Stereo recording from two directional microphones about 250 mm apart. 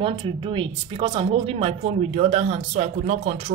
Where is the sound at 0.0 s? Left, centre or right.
Centre.